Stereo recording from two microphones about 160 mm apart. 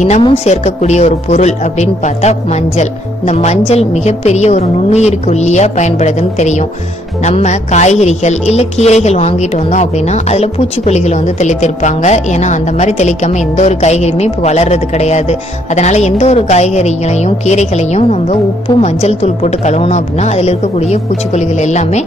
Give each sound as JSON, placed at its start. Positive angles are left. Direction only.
{"t": 0.2, "sound": "a woman's voice", "side_deg": 40}